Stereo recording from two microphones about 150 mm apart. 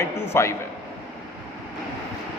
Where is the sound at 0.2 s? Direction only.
20° left (ahead or behind).